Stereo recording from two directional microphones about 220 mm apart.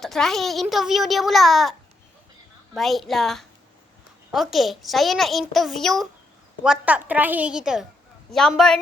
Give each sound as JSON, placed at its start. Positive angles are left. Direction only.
{"t": 0.0, "sound": "a child's voice", "side_deg": 0}
{"t": 2.7, "sound": "a child's voice", "side_deg": 0}